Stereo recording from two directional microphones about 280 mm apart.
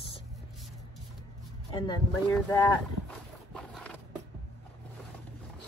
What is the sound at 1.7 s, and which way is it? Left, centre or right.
Speech, centre.